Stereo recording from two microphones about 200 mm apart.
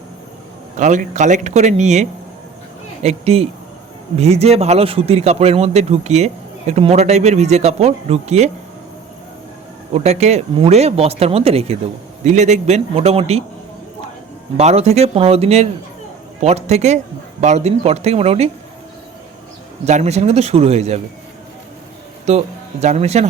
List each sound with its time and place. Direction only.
0.8 s a man's voice: 40° right (ahead or behind)
9.9 s a man's voice: 35° right (ahead or behind)
14.6 s a man's voice: 35° right (ahead or behind)
19.8 s a man's voice: 35° right (ahead or behind)
22.3 s a man's voice: 35° right (ahead or behind)